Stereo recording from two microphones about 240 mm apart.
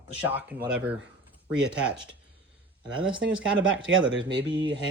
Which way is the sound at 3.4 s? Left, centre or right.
Right.